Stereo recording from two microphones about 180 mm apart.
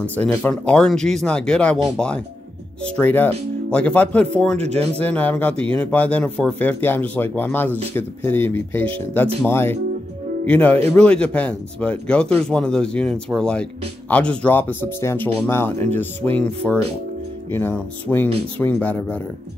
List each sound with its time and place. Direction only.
0.0 s speech: 10° left (ahead or behind)
4.6 s speech: 35° right (ahead or behind)
5.1 s speech: 10° left (ahead or behind)